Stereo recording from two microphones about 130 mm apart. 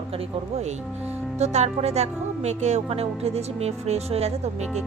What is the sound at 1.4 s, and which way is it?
Speech, 60° right (ahead or behind).